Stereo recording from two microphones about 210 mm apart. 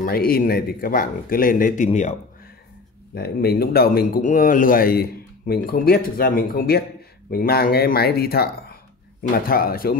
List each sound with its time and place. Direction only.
0.0 s speech: 45° left (ahead or behind)
3.2 s speech: 50° left (ahead or behind)